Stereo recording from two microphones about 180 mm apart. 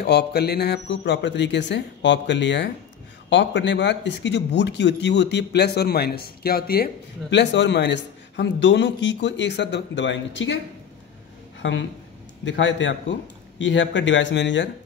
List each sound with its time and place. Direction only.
0.0 s speech: 65° left (ahead or behind); by 10.6 s 85° left
11.6 s speech: 90° left